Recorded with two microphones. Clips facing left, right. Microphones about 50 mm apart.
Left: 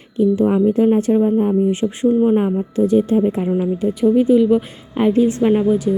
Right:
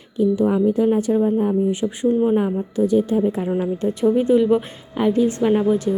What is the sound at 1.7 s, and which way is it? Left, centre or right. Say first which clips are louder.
Speech: left 3 dB; left.